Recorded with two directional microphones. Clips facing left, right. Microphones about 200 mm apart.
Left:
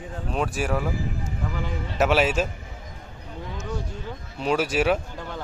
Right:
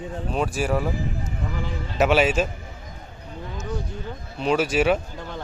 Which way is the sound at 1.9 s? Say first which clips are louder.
Right 2 dB; centre (ahead or behind).